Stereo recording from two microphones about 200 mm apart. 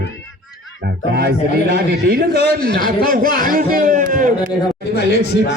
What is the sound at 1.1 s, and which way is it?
A man's voice, 55° right (ahead or behind).